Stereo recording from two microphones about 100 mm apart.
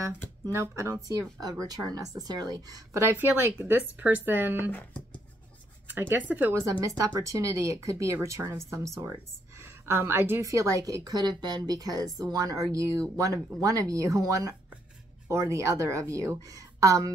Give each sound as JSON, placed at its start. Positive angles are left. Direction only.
{"t": 0.5, "sound": "a woman's voice", "side_deg": -30}
{"t": 5.9, "sound": "speech", "side_deg": -20}
{"t": 6.8, "sound": "a woman's voice", "side_deg": -35}